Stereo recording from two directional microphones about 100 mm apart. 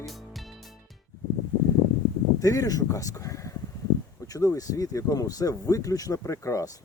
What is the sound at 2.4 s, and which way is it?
Speech, 35° left (ahead or behind).